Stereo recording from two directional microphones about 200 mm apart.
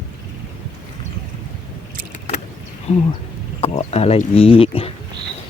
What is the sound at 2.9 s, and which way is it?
Speech, 35° left (ahead or behind).